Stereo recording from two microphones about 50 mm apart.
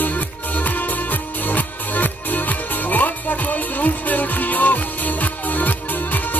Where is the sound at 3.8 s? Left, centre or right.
Left.